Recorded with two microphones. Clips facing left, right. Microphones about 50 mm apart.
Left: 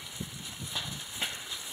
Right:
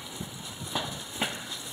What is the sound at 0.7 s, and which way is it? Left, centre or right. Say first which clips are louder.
Horse: right 6 dB; right.